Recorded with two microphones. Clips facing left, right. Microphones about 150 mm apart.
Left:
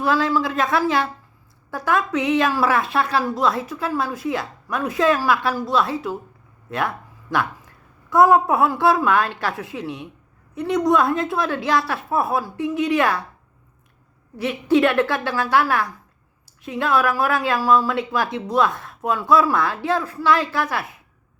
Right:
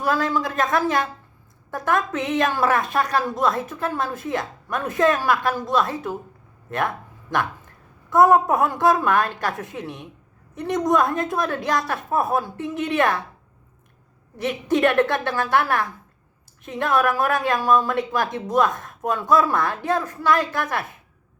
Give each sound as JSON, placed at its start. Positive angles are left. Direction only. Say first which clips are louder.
{"t": 0.0, "sound": "a woman's voice", "louder": "left 2 dB", "side_deg": -45}
{"t": 8.1, "sound": "a woman's voice", "louder": "left 1 dB", "side_deg": -50}
{"t": 14.4, "sound": "a woman's voice", "louder": "left 2 dB", "side_deg": -50}